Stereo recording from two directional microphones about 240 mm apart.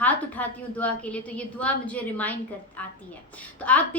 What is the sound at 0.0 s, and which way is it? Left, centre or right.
A woman's voice, centre.